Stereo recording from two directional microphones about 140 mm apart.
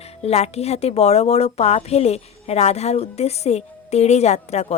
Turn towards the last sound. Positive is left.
turn(degrees=50)  # may be behind; listen again after turning